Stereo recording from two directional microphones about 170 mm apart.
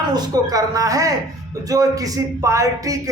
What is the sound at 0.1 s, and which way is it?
A man's voice, 25° right (ahead or behind).